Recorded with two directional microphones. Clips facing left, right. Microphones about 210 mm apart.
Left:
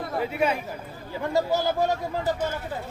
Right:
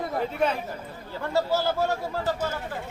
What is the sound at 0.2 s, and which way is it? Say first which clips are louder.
Speech: left 2 dB; 10° left (ahead or behind).